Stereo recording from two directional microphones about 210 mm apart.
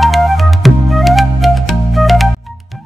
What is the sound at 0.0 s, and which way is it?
Music, centre (ahead or behind).